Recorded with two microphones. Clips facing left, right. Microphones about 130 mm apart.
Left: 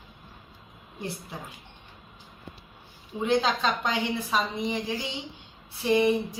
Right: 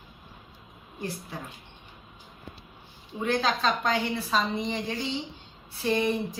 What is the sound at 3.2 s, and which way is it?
A woman's voice, 20° left (ahead or behind).